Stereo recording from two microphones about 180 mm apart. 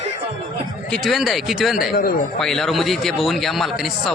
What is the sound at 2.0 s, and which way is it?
Speech, 55° left (ahead or behind).